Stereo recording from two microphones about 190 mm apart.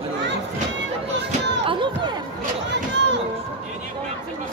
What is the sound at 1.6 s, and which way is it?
Music, 25° right (ahead or behind).